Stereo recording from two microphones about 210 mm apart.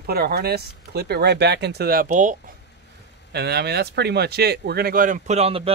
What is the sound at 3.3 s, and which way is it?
Speech, 50° right (ahead or behind).